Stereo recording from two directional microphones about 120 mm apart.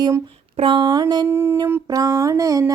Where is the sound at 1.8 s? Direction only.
30° right (ahead or behind).